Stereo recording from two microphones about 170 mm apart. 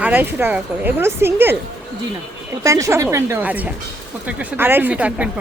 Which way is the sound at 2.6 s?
20° right (ahead or behind).